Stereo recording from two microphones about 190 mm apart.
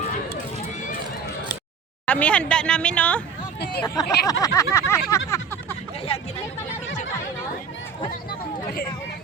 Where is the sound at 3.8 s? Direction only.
20° left (ahead or behind).